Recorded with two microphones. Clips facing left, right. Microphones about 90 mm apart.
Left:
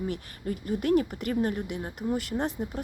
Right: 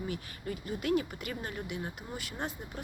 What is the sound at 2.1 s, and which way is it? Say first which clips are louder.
Speech: left 12 dB; 35° left (ahead or behind).